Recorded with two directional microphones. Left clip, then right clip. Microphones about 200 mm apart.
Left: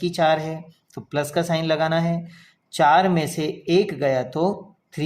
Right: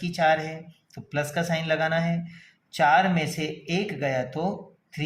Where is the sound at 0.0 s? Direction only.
35° left (ahead or behind).